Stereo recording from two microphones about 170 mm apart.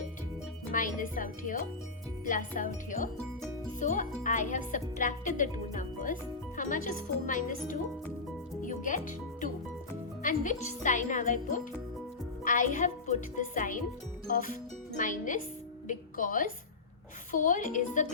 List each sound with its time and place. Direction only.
0.7 s speech: 50° left (ahead or behind)
8.6 s music: 50° left (ahead or behind)
10.2 s speech: 50° left (ahead or behind)